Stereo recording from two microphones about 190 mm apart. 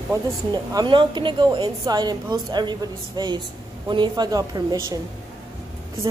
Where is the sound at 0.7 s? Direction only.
25° right (ahead or behind).